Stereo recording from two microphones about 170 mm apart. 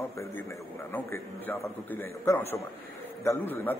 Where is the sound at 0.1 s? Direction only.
15° left (ahead or behind).